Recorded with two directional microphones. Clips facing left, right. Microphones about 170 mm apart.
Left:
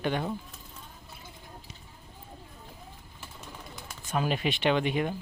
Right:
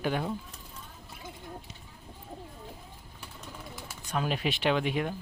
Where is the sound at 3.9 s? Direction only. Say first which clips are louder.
Left 2 dB; centre (ahead or behind).